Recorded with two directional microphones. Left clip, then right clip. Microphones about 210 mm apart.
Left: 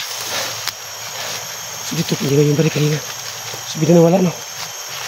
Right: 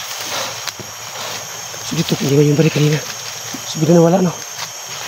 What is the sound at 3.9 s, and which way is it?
Speech, centre (ahead or behind).